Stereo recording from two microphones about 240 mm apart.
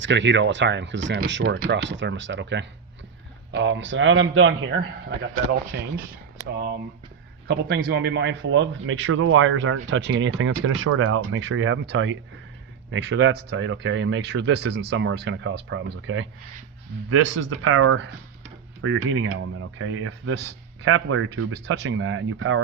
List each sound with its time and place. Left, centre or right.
0.0 s speech: right
5.7 s speech: right
7.4 s speech: right